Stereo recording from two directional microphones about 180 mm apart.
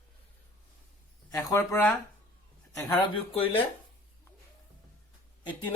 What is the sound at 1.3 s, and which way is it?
Speech, 15° left (ahead or behind).